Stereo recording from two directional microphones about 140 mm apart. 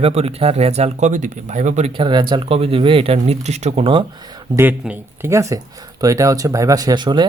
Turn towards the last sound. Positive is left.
turn(degrees=-30)  # may be behind; listen again after turning